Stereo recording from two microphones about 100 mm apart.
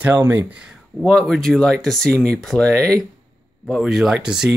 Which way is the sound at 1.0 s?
5° left (ahead or behind).